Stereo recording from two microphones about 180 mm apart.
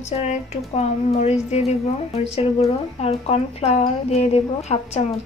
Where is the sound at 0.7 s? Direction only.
35° left (ahead or behind).